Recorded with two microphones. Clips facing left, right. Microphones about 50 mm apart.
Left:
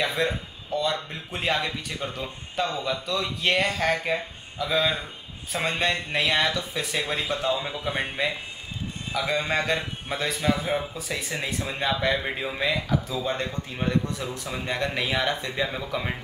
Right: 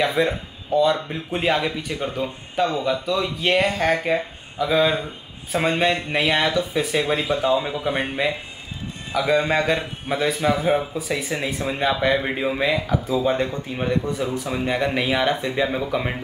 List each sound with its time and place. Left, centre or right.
0.0 s speech: centre